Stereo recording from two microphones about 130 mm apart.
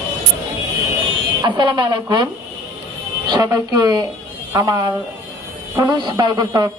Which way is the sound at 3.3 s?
30° right (ahead or behind).